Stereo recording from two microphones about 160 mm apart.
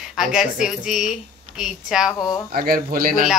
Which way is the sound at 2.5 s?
70° right (ahead or behind).